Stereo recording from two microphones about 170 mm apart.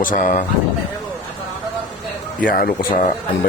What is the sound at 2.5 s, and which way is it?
Speech, 55° left (ahead or behind).